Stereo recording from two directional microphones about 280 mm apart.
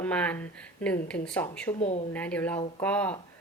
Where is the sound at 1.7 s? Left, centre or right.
Left.